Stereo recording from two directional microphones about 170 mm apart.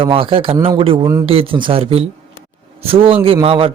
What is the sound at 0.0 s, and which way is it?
A man's voice, 30° right (ahead or behind).